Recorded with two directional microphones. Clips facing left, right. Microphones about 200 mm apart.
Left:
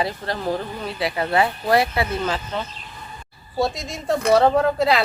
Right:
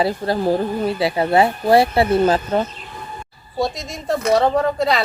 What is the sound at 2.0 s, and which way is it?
Speech, 55° right (ahead or behind).